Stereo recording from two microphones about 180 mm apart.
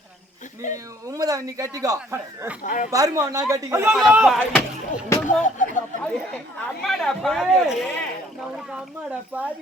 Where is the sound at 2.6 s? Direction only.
45° left (ahead or behind).